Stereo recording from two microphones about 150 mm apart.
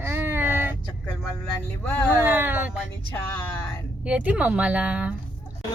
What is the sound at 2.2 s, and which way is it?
Speech, 10° right (ahead or behind).